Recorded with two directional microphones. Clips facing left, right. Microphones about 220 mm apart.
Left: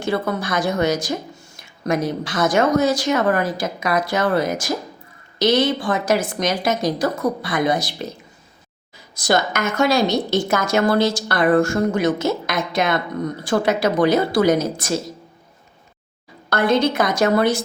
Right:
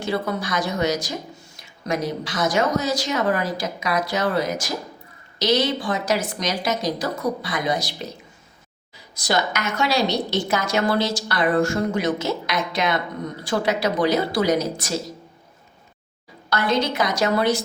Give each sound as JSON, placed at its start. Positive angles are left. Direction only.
{"t": 0.0, "sound": "a woman's voice", "side_deg": 50}
{"t": 9.2, "sound": "a woman's voice", "side_deg": 50}
{"t": 16.5, "sound": "a woman's voice", "side_deg": 50}